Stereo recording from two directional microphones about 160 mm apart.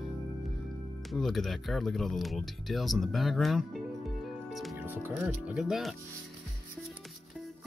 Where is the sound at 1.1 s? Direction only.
Centre (ahead or behind).